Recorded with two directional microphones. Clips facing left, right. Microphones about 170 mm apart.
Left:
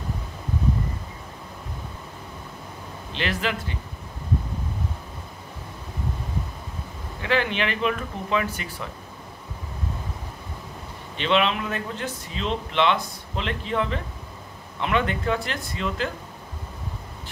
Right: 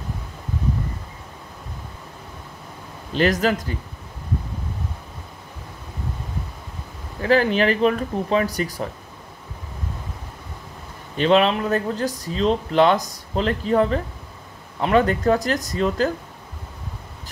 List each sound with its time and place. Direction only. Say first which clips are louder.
3.1 s speech: right 8 dB; 40° right (ahead or behind)
7.2 s speech: right 7 dB; 40° right (ahead or behind)
11.1 s speech: right 6 dB; 40° right (ahead or behind)